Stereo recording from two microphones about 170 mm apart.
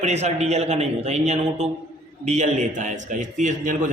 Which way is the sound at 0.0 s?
40° right (ahead or behind).